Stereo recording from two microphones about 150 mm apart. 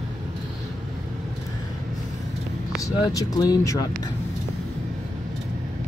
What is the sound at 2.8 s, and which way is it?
Speech, 25° left (ahead or behind).